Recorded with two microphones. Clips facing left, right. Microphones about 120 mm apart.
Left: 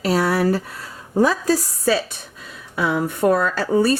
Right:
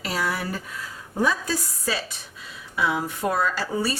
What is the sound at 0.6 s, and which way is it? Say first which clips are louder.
Speech: left 1 dB; 35° left (ahead or behind).